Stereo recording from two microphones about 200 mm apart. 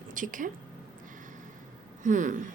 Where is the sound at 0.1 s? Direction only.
40° right (ahead or behind).